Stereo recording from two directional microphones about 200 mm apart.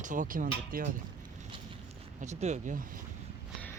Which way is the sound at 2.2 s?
35° right (ahead or behind).